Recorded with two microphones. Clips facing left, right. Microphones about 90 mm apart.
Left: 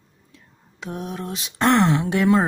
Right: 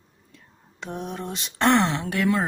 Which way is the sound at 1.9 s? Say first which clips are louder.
Left 7 dB; 15° left (ahead or behind).